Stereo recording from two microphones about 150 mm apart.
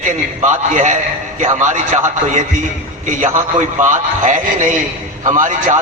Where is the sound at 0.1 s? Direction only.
55° right (ahead or behind).